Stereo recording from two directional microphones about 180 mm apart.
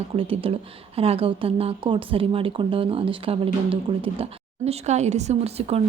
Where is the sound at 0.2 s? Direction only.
30° right (ahead or behind).